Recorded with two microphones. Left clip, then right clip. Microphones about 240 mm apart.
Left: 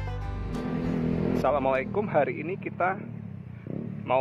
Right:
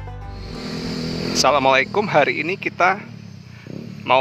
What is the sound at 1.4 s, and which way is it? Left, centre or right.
Speech, right.